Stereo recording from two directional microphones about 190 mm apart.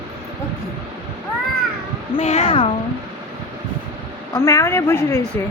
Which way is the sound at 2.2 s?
35° left (ahead or behind).